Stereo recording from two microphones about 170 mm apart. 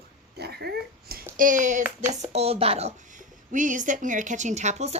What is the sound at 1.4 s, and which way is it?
Speech, 50° right (ahead or behind).